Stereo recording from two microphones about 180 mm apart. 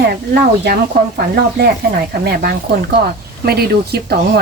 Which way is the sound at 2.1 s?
55° right (ahead or behind).